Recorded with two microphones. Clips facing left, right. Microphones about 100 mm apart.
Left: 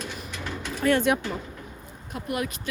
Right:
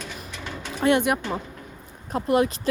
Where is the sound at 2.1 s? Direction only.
30° right (ahead or behind).